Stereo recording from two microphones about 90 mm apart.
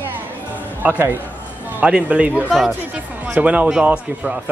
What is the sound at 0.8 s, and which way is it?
A woman's voice, 25° right (ahead or behind).